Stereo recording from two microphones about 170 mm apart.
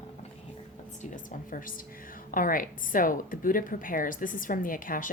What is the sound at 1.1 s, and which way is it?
Speech, 55° left (ahead or behind).